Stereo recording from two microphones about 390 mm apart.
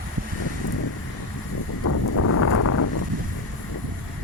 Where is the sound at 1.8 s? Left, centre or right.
Left.